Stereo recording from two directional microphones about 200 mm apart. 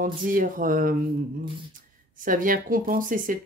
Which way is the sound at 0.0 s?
45° right (ahead or behind).